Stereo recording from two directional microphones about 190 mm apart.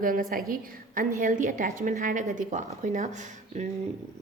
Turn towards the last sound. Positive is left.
turn(degrees=-40)  # may be behind; listen again after turning